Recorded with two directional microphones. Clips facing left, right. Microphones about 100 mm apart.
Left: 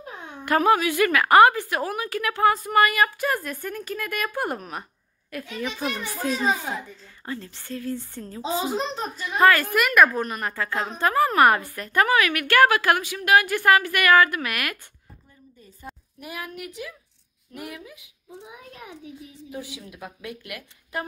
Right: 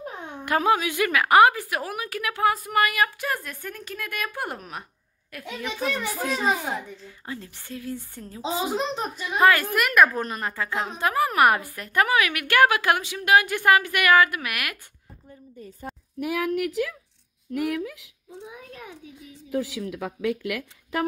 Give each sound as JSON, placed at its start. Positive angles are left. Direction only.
{"t": 0.5, "sound": "a woman's voice", "side_deg": -15}
{"t": 6.6, "sound": "a woman's voice", "side_deg": -10}
{"t": 9.7, "sound": "a woman's voice", "side_deg": 0}
{"t": 10.2, "sound": "a woman's voice", "side_deg": -30}
{"t": 10.6, "sound": "a woman's voice", "side_deg": -15}
{"t": 16.2, "sound": "speech", "side_deg": -90}
{"t": 19.5, "sound": "speech", "side_deg": -90}